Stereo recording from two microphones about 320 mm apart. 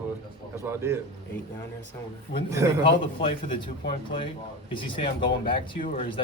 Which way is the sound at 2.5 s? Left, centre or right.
Centre.